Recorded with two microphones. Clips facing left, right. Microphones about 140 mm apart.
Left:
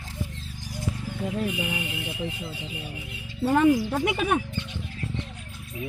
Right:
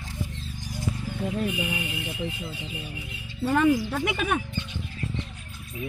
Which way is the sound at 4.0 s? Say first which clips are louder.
Left 2 dB; 30° left (ahead or behind).